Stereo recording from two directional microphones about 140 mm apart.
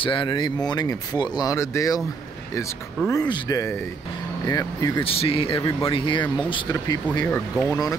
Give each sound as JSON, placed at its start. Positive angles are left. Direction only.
{"t": 0.0, "sound": "speech", "side_deg": 35}
{"t": 3.1, "sound": "speech", "side_deg": 25}
{"t": 5.0, "sound": "speech", "side_deg": 40}
{"t": 7.2, "sound": "speech", "side_deg": 10}